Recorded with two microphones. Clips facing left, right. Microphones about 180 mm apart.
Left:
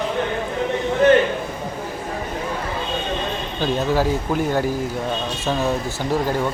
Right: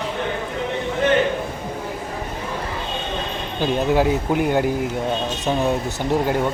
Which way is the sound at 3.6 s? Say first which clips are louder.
Right 2 dB; 20° right (ahead or behind).